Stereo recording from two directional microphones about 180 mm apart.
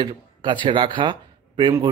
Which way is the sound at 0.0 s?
25° right (ahead or behind).